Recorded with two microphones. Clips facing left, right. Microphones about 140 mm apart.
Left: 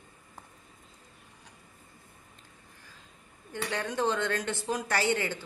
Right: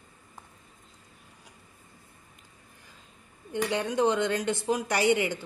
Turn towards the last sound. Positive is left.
turn(degrees=-15)  # may be behind; listen again after turning